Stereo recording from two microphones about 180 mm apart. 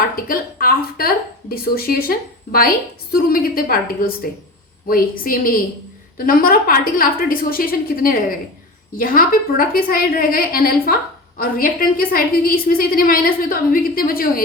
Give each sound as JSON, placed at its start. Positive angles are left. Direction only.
{"t": 0.2, "sound": "a woman's voice", "side_deg": 55}